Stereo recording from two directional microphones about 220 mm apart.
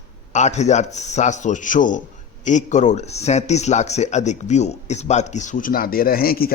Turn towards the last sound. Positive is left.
turn(degrees=45)  # may be behind; listen again after turning